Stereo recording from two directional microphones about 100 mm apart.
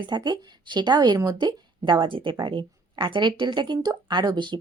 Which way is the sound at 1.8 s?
50° right (ahead or behind).